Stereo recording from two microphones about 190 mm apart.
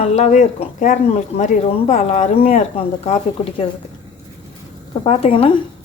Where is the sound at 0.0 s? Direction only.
35° left (ahead or behind).